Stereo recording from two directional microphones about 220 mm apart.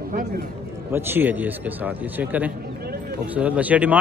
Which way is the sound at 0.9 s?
10° right (ahead or behind).